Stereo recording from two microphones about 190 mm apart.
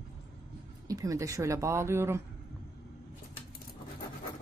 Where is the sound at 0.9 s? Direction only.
15° right (ahead or behind).